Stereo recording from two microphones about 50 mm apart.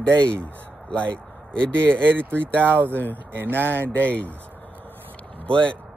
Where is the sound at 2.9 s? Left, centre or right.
Left.